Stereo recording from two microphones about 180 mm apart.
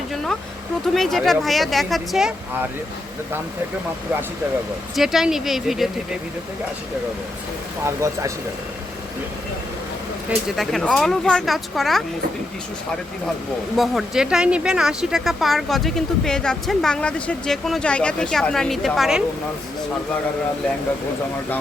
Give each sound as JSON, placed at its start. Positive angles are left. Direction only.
{"t": 0.9, "sound": "speech", "side_deg": 0}
{"t": 4.9, "sound": "speech", "side_deg": 0}
{"t": 7.9, "sound": "speech", "side_deg": -15}
{"t": 10.2, "sound": "speech", "side_deg": 0}
{"t": 13.7, "sound": "speech", "side_deg": 0}